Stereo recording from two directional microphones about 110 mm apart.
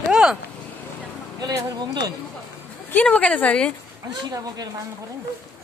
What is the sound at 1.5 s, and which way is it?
Speech, 35° right (ahead or behind).